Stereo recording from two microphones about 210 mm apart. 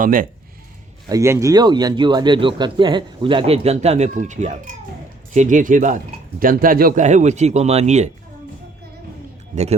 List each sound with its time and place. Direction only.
0.0 s speech: 40° right (ahead or behind)
1.1 s speech: 15° right (ahead or behind); by 8.1 s 35° right (ahead or behind)